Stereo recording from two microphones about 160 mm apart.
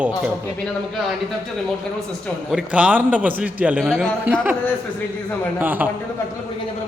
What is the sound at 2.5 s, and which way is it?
A man's voice, 5° right (ahead or behind).